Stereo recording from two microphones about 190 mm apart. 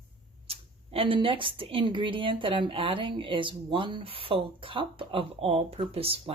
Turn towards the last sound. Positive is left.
turn(degrees=-30)  # may be behind; listen again after turning